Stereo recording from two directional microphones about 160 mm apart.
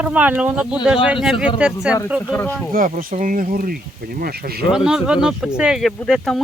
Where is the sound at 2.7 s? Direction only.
60° right (ahead or behind).